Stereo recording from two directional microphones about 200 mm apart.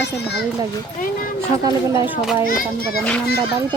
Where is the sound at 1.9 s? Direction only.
5° right (ahead or behind).